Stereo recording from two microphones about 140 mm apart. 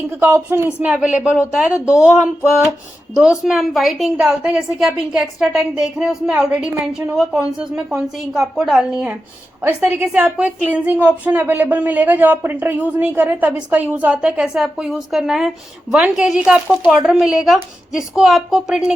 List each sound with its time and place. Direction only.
0.2 s a woman's voice: 15° right (ahead or behind)